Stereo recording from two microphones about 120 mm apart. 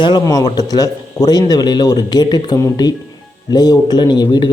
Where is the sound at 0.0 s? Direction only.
35° left (ahead or behind).